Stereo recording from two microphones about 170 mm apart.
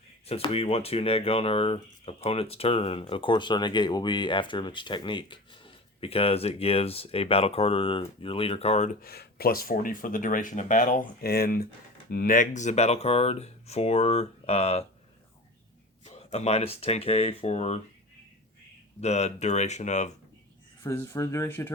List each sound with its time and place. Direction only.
0.3 s speech: 35° left (ahead or behind)
9.0 s speech: 65° left (ahead or behind); by 14.8 s 35° left (ahead or behind)
16.0 s speech: 40° left (ahead or behind)
18.9 s speech: 40° left (ahead or behind)
20.8 s speech: 15° left (ahead or behind)